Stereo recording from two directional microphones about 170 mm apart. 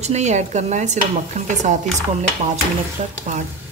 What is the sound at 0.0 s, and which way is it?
Speech, 40° right (ahead or behind).